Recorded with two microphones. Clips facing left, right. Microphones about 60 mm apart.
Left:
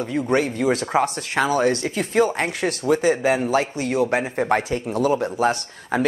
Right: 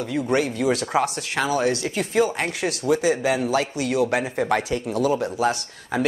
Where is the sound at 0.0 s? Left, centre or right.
Left.